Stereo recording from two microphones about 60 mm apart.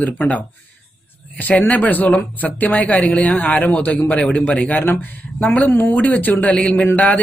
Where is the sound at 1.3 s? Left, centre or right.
Left.